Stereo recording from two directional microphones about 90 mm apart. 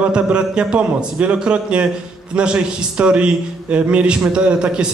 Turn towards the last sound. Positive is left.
turn(degrees=-10)  # may be behind; listen again after turning